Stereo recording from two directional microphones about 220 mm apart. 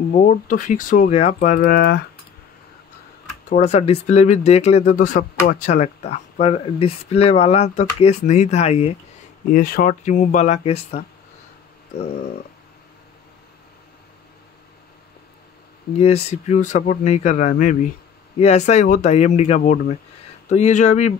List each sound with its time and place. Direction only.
0.1 s speech: 35° left (ahead or behind)
3.4 s speech: 35° left (ahead or behind)
9.5 s speech: 40° left (ahead or behind)
16.0 s speech: 30° left (ahead or behind)